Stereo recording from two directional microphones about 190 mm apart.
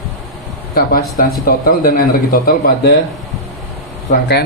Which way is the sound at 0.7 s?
50° left (ahead or behind).